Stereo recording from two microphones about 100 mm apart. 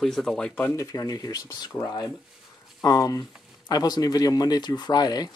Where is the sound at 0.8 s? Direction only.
35° left (ahead or behind).